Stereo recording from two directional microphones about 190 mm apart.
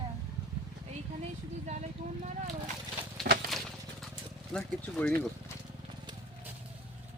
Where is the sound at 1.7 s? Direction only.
40° right (ahead or behind).